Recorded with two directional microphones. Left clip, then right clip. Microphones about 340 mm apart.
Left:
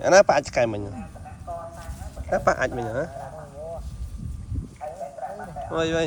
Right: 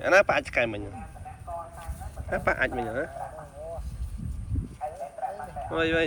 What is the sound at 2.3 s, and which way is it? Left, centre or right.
Speech, centre.